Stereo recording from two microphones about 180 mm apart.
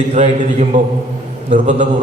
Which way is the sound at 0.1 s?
40° right (ahead or behind).